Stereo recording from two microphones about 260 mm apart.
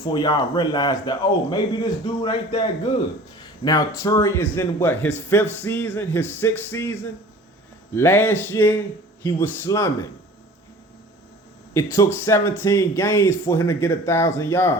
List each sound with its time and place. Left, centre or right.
0.0 s speech: centre
11.7 s speech: centre